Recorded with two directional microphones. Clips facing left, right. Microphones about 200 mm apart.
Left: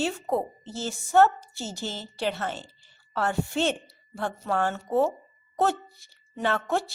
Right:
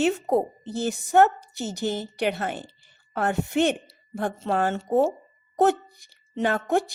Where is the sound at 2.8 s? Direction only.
15° right (ahead or behind).